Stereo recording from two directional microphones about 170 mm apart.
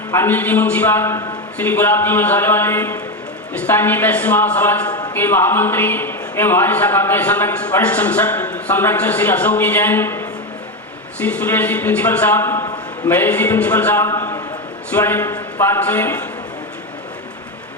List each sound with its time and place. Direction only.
0.1 s a man's voice: 15° left (ahead or behind)
4.9 s a sound: 25° left (ahead or behind)
5.1 s a man's voice: 10° left (ahead or behind)